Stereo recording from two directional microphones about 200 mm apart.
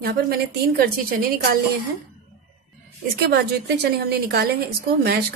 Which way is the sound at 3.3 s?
55° right (ahead or behind).